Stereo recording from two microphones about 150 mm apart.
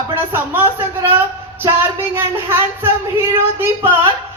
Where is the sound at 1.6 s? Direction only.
15° right (ahead or behind).